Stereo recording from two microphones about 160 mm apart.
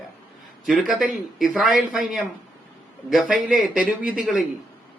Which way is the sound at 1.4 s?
Centre (ahead or behind).